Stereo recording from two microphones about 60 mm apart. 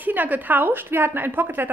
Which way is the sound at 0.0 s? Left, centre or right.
Right.